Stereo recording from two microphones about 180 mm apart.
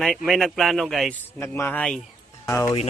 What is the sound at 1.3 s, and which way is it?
Speech, 15° left (ahead or behind).